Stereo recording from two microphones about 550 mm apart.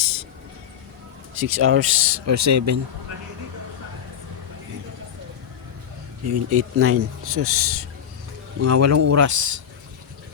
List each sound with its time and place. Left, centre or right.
1.4 s a man's voice: right
6.2 s a man's voice: right